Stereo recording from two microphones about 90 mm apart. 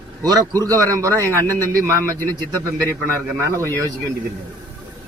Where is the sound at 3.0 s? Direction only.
35° right (ahead or behind).